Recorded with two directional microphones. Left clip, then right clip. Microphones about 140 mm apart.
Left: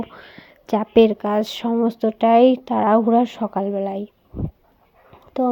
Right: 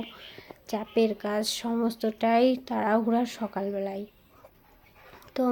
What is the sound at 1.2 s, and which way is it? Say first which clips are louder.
Speech: left 8 dB; 55° left (ahead or behind).